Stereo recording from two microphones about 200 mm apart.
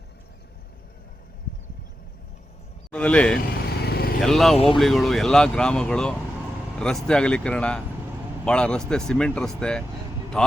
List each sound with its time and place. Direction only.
2.9 s speech: 5° left (ahead or behind)
3.7 s vehicle: 50° left (ahead or behind)
4.2 s speech: centre (ahead or behind)